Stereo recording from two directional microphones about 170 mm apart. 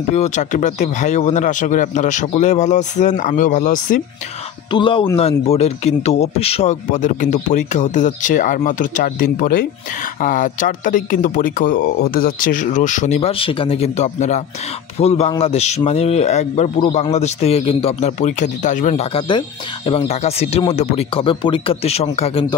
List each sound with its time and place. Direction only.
0.1 s speech: 45° left (ahead or behind)
4.7 s a man's voice: 30° left (ahead or behind)